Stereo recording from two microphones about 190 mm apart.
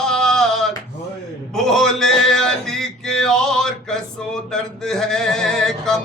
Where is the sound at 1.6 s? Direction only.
Centre (ahead or behind).